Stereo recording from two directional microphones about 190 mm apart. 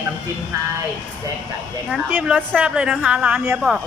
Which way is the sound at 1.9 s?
5° right (ahead or behind).